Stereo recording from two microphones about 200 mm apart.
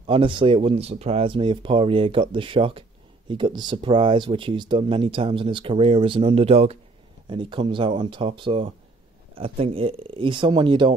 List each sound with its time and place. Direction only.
0.0 s speech: 25° right (ahead or behind)